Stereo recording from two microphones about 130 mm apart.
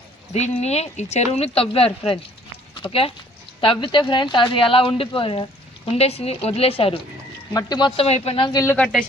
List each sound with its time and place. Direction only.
0.3 s speech: 60° left (ahead or behind)
7.5 s speech: 35° left (ahead or behind)
7.9 s speech: 55° left (ahead or behind)